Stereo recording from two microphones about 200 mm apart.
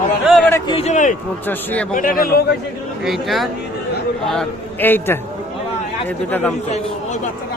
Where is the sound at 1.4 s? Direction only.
10° left (ahead or behind).